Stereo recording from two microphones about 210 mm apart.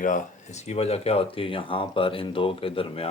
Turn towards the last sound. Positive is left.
turn(degrees=25)  # may be behind; listen again after turning